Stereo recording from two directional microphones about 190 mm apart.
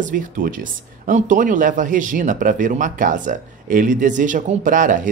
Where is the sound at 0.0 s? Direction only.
45° right (ahead or behind).